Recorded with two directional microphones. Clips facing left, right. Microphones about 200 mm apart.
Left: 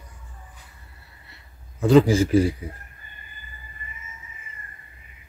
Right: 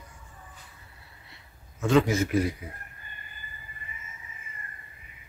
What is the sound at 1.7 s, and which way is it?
Speech, 35° left (ahead or behind).